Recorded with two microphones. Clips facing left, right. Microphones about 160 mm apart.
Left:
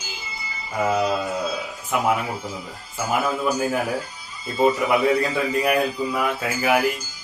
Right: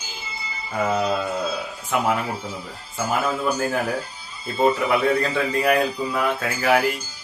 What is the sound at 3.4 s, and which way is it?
A man's voice, 5° left (ahead or behind).